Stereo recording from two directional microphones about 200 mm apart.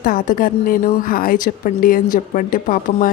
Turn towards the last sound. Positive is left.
turn(degrees=45)  # may be behind; listen again after turning